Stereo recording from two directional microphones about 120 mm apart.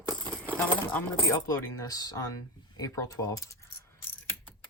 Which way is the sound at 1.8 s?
30° left (ahead or behind).